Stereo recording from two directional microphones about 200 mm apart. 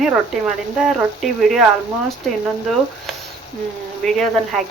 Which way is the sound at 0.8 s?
Centre (ahead or behind).